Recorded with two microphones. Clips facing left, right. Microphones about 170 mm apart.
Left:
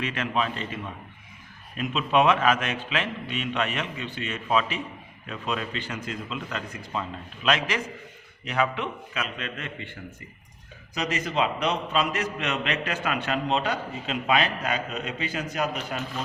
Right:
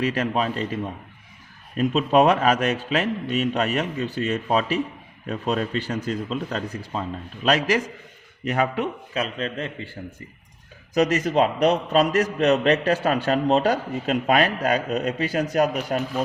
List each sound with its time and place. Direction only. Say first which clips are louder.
0.0 s a man's voice: right 5 dB; 40° right (ahead or behind)
10.9 s a man's voice: right 8 dB; 45° right (ahead or behind)